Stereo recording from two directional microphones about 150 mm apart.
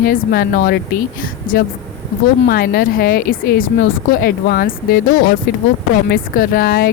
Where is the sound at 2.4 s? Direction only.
90° left.